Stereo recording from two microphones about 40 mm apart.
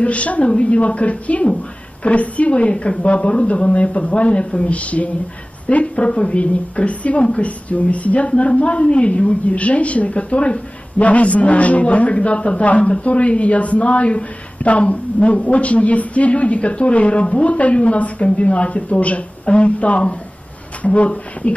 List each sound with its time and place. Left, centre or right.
0.0 s a woman's voice: left